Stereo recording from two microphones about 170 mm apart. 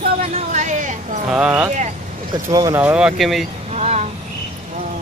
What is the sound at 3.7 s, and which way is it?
Speech, 40° right (ahead or behind).